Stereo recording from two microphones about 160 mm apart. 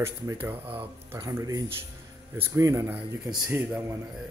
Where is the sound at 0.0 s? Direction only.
15° right (ahead or behind).